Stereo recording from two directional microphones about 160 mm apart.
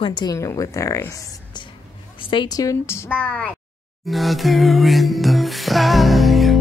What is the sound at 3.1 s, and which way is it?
Speech, 10° right (ahead or behind).